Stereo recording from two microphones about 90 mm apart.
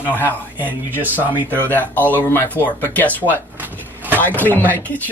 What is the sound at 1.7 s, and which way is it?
Speech, 20° left (ahead or behind).